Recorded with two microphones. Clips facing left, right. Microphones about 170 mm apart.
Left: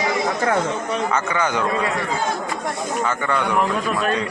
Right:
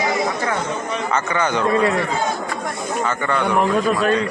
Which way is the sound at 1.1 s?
10° left (ahead or behind).